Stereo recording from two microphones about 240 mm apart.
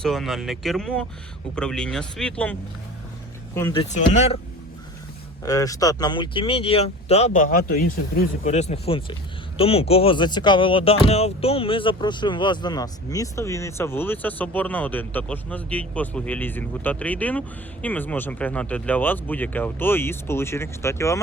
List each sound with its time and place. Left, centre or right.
0.0 s speech: centre
3.8 s speech: left
5.5 s speech: centre